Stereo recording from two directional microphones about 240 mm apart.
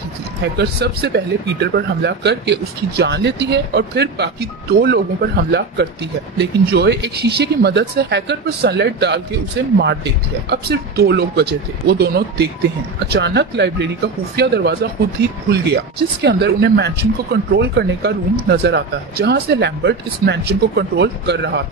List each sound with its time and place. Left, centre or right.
0.6 s speech: right
10.5 s speech: right